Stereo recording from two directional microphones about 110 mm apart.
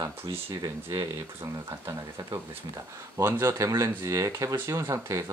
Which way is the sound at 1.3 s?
25° right (ahead or behind).